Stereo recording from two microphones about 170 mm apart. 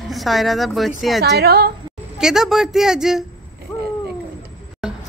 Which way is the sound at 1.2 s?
75° right (ahead or behind).